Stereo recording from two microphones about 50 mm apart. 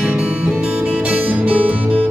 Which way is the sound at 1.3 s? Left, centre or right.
Right.